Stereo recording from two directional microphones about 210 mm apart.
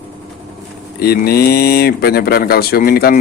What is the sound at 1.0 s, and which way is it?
Speech, 45° left (ahead or behind).